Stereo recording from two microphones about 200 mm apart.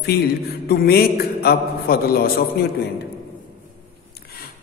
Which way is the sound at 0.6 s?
50° left (ahead or behind).